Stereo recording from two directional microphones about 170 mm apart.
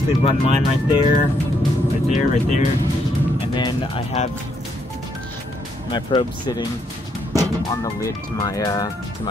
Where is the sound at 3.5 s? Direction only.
30° left (ahead or behind).